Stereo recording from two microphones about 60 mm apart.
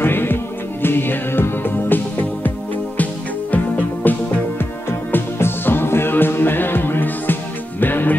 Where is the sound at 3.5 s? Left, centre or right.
Left.